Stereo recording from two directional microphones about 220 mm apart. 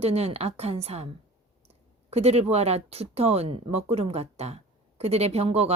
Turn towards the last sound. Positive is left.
turn(degrees=-30)  # may be behind; listen again after turning